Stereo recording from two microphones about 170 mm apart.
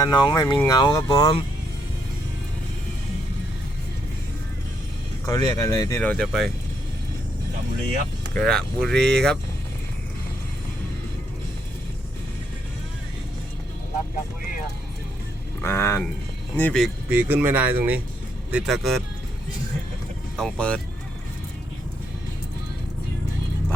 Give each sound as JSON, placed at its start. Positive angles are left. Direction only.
{"t": 0.0, "sound": "speech", "side_deg": 25}
{"t": 5.2, "sound": "speech", "side_deg": 20}
{"t": 6.0, "sound": "speech", "side_deg": 5}
{"t": 8.4, "sound": "speech", "side_deg": 5}
{"t": 15.6, "sound": "speech", "side_deg": 15}
{"t": 17.1, "sound": "speech", "side_deg": -10}
{"t": 20.3, "sound": "speech", "side_deg": 5}